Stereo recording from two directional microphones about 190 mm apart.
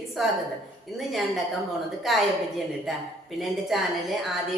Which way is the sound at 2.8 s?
Centre (ahead or behind).